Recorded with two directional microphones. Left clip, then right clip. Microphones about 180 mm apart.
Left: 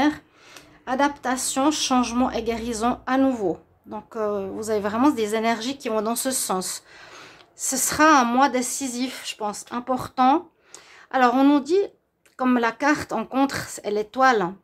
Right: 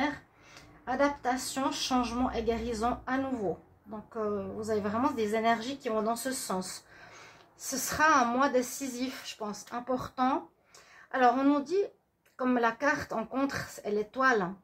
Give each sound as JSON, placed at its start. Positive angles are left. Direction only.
{"t": 0.8, "sound": "a woman's voice", "side_deg": 55}